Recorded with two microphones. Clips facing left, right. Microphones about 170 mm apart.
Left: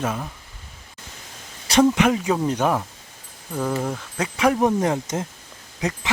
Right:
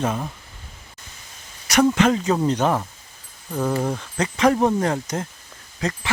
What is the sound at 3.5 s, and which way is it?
Speech, 10° right (ahead or behind).